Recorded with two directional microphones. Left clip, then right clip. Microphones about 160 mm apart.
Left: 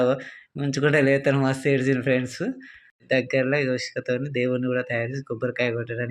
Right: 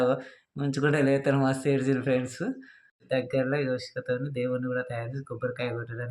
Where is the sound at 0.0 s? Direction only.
20° left (ahead or behind).